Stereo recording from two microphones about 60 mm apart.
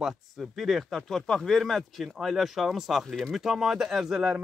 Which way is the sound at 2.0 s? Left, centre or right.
Centre.